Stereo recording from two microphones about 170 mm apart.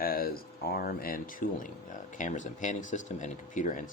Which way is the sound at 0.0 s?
60° left (ahead or behind).